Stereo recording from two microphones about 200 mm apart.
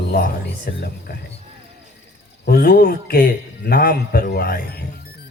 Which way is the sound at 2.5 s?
50° left (ahead or behind).